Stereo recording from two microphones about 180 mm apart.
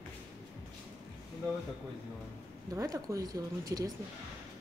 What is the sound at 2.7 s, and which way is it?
Speech, 15° right (ahead or behind).